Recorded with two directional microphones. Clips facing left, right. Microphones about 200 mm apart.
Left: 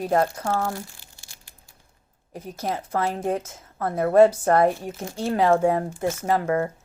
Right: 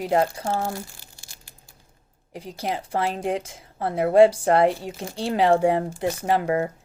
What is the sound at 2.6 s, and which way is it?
Speech, 15° right (ahead or behind).